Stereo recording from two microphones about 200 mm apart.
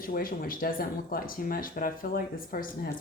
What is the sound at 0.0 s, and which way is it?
Speech, 45° left (ahead or behind).